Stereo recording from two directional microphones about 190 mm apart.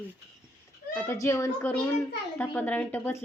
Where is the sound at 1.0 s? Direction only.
15° left (ahead or behind).